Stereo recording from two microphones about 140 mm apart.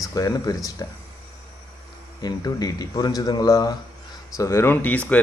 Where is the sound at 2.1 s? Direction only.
25° left (ahead or behind); by 5.2 s 10° left (ahead or behind).